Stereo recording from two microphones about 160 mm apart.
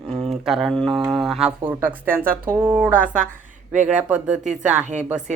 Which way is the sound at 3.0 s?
55° right (ahead or behind).